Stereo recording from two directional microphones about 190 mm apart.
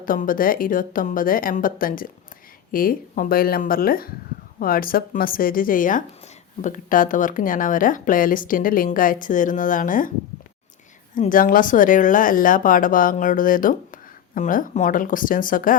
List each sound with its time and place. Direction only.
0.0 s speech: 45° left (ahead or behind)
11.1 s speech: 45° left (ahead or behind)